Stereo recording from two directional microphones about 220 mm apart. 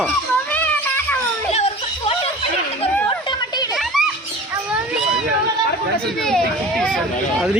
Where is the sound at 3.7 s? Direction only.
Centre (ahead or behind).